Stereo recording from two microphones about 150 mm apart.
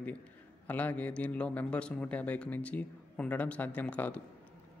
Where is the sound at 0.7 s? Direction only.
10° left (ahead or behind).